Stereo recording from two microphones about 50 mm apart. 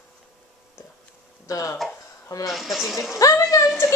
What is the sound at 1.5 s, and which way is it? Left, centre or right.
Speech, left.